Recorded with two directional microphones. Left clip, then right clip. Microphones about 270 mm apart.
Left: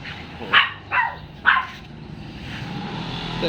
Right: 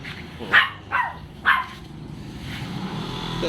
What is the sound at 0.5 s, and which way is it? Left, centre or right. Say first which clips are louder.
Dog: even; right.